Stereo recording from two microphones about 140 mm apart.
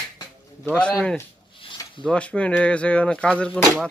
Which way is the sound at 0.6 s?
5° left (ahead or behind).